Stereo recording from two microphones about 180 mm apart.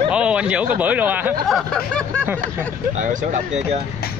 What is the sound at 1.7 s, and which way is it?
Speech, 5° left (ahead or behind).